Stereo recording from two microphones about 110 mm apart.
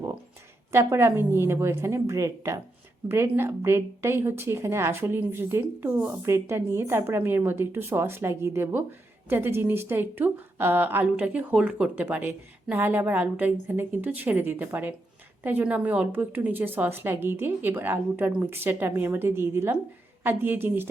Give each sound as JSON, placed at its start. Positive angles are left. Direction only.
{"t": 0.7, "sound": "a woman's voice", "side_deg": -25}